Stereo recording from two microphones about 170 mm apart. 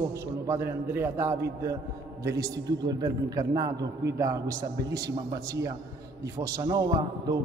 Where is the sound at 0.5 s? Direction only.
15° right (ahead or behind).